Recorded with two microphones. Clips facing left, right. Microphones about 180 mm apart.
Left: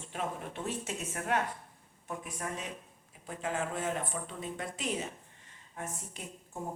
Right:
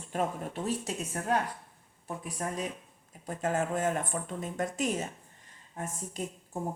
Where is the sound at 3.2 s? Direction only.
45° right (ahead or behind).